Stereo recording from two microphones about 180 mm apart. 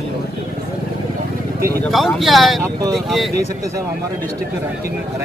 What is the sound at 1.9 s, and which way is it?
Speech, centre (ahead or behind).